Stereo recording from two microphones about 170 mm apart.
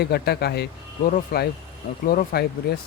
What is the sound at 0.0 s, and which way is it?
Speech, 70° left (ahead or behind).